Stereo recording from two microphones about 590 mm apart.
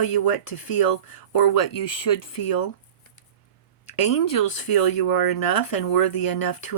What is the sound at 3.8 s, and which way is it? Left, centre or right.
Speech, left.